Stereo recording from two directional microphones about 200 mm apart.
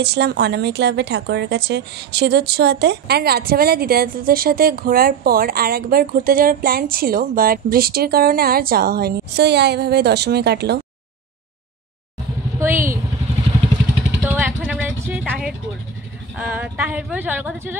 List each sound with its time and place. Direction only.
0.0 s speech: 55° right (ahead or behind)
12.5 s speech: 10° right (ahead or behind)
14.3 s a sound: 5° right (ahead or behind)
16.3 s speech: 10° right (ahead or behind)